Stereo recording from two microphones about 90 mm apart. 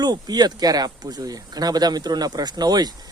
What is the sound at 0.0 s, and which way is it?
Speech, 50° right (ahead or behind).